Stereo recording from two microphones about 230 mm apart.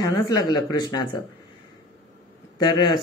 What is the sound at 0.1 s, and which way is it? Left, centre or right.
Speech, centre.